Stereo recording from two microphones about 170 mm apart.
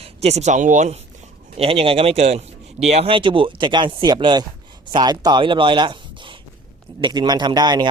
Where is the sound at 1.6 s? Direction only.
35° right (ahead or behind).